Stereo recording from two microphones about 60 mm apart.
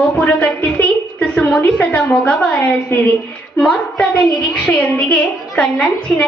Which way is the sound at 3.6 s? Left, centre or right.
Centre.